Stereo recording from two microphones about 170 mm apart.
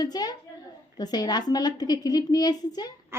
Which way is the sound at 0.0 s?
25° left (ahead or behind).